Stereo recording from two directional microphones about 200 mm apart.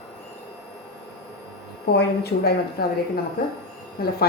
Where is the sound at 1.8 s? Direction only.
55° left (ahead or behind).